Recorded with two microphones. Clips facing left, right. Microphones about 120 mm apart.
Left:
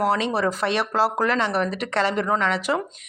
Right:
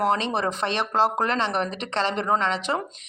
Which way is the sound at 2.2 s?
25° right (ahead or behind).